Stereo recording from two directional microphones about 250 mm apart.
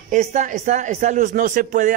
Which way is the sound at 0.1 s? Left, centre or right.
Right.